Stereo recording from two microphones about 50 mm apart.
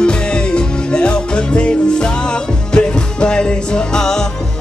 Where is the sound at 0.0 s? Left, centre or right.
Centre.